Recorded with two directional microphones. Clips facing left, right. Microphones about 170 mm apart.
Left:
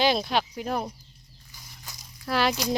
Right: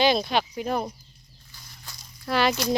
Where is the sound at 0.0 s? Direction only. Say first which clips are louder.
Right 2 dB; 5° left (ahead or behind).